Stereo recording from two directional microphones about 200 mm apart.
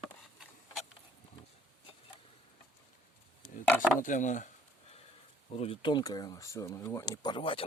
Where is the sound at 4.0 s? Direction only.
40° left (ahead or behind).